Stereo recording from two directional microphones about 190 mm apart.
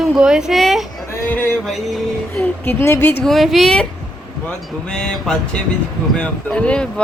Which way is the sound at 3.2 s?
Centre (ahead or behind).